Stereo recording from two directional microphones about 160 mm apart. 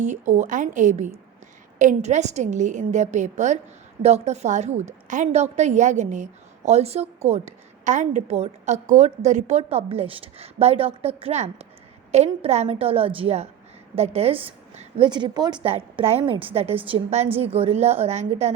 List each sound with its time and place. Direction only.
0.0 s a woman's voice: 50° right (ahead or behind); by 15.6 s 25° right (ahead or behind)
15.6 s a woman's voice: 40° right (ahead or behind)